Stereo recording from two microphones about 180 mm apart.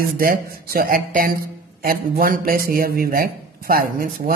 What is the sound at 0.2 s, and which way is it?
Speech, 55° right (ahead or behind).